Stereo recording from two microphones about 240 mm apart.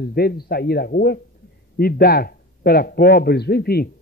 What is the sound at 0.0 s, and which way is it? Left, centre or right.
A man's voice, left.